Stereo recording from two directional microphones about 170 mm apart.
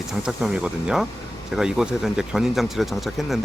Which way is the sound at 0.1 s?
5° right (ahead or behind).